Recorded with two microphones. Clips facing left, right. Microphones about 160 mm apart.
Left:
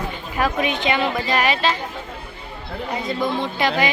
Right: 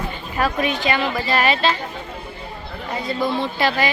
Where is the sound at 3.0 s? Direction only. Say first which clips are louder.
Right 2 dB; 20° left (ahead or behind).